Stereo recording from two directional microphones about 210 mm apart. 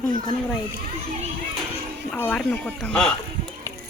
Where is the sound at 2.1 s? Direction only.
5° left (ahead or behind).